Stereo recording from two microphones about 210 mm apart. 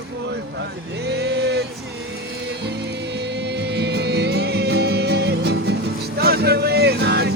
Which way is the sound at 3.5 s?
50° right (ahead or behind).